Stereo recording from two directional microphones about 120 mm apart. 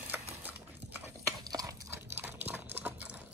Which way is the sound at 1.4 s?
30° right (ahead or behind).